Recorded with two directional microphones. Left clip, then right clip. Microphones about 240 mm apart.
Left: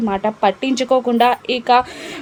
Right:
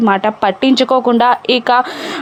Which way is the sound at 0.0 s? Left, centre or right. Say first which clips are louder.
Right 4 dB; right.